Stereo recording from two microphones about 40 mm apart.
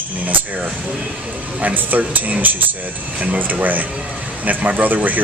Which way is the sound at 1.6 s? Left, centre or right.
Right.